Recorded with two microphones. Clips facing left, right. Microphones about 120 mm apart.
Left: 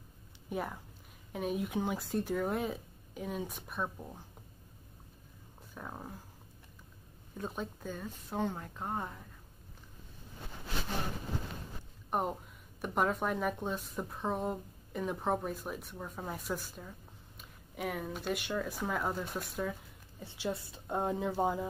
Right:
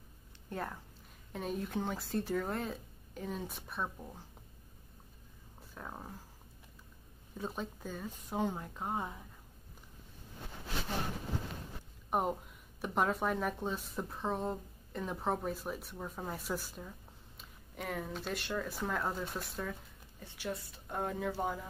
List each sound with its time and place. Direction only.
0.5 s speech: 10° left (ahead or behind)
5.8 s speech: centre (ahead or behind)
7.3 s speech: centre (ahead or behind)
12.1 s speech: centre (ahead or behind)
20.2 s a woman's voice: 20° left (ahead or behind)